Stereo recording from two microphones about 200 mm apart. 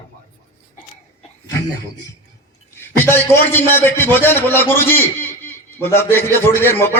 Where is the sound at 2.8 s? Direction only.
10° left (ahead or behind).